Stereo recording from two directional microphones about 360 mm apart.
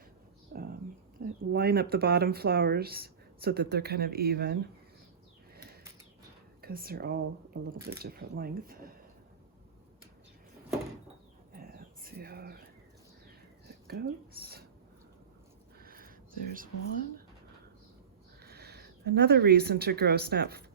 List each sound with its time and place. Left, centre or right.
0.5 s whispering: right
1.2 s speech: right
6.6 s speech: right
11.5 s a sound: right
13.8 s speech: right
15.8 s a sound: right
18.4 s speech: right